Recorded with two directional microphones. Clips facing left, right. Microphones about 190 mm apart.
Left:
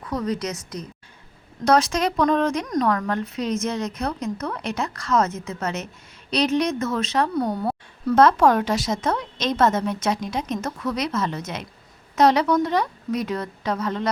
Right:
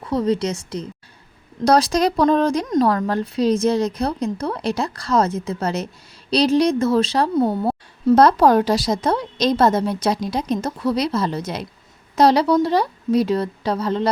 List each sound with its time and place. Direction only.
0.0 s a woman's voice: 30° right (ahead or behind)